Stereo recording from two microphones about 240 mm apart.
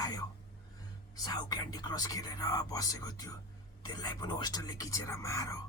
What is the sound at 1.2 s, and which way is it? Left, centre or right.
Speech, centre.